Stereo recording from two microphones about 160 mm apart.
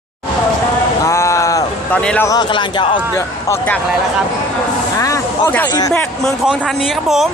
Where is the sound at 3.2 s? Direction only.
15° left (ahead or behind).